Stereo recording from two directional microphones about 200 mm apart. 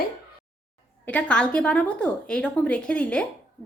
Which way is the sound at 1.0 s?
5° left (ahead or behind).